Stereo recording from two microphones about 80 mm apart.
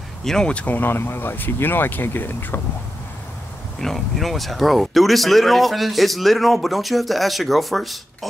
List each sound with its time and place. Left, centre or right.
0.2 s speech: centre; by 2.6 s left
3.8 s speech: centre